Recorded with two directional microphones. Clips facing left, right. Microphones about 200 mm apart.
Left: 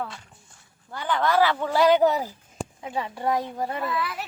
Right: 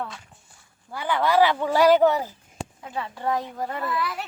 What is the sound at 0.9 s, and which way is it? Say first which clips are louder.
Speech: right 1 dB; 5° right (ahead or behind).